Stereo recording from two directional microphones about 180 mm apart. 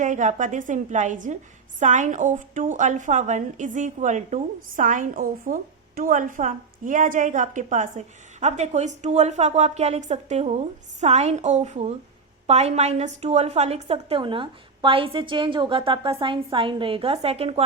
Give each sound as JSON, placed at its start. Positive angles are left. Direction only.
{"t": 0.0, "sound": "a woman's voice", "side_deg": -45}